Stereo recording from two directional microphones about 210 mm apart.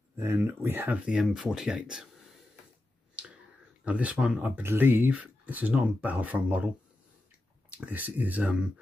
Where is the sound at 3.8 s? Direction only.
5° right (ahead or behind).